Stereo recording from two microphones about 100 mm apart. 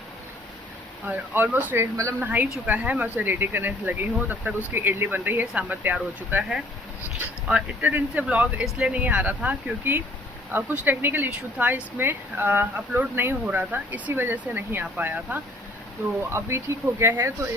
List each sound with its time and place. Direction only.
1.0 s speech: 20° right (ahead or behind)
7.4 s speech: 15° right (ahead or behind); by 17.5 s 30° right (ahead or behind)